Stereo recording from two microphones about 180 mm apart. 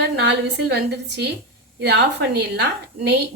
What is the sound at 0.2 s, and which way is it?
A woman's voice, 70° right (ahead or behind).